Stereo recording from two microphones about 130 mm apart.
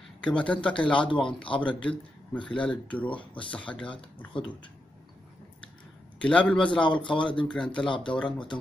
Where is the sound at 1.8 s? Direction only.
10° left (ahead or behind).